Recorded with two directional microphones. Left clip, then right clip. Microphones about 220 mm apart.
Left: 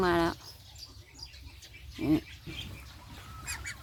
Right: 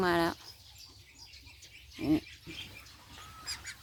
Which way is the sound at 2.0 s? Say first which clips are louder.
Left 2 dB; centre (ahead or behind).